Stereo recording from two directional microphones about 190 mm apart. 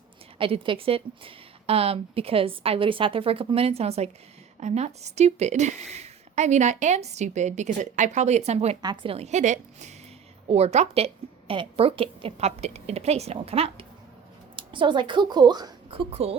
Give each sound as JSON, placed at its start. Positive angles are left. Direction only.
{"t": 0.3, "sound": "a woman's voice", "side_deg": -30}
{"t": 8.8, "sound": "a woman's voice", "side_deg": -20}
{"t": 9.1, "sound": "a woman's voice", "side_deg": -35}